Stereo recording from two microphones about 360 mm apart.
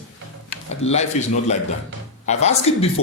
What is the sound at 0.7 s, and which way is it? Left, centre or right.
Speech, centre.